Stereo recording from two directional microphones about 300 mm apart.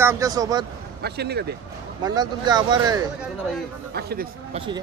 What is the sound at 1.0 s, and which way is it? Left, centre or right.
Speech, right.